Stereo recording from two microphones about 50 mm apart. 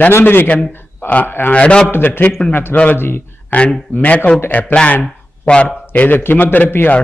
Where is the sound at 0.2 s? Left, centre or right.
Left.